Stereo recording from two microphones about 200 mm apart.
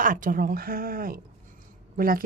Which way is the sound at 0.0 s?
40° right (ahead or behind).